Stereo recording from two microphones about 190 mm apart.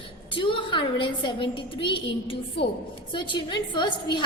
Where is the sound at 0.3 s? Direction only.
25° left (ahead or behind).